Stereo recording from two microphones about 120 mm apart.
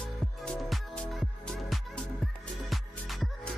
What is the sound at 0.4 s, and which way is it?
Music, centre (ahead or behind).